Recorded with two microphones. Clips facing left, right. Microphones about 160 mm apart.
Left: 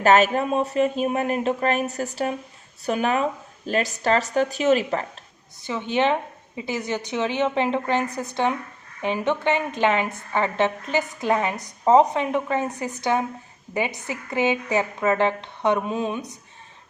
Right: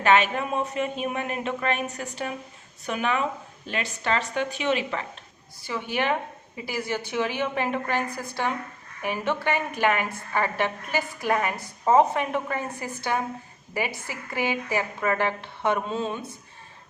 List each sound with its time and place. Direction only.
0.0 s speech: 40° left (ahead or behind)
5.6 s a woman's voice: 20° left (ahead or behind)